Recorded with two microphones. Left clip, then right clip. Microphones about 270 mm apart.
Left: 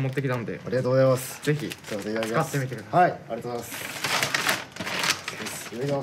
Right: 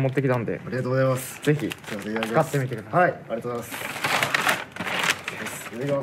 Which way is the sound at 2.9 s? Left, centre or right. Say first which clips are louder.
Even; centre.